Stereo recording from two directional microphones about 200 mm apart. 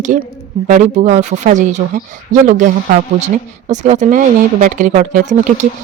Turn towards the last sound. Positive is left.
turn(degrees=-40)  # may be behind; listen again after turning